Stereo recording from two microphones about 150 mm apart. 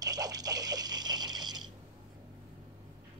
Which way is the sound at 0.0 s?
25° right (ahead or behind).